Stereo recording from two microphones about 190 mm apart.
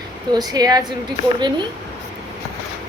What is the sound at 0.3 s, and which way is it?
Speech, 20° right (ahead or behind).